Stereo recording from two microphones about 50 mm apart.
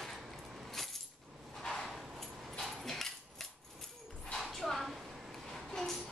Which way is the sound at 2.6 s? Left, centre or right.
Centre.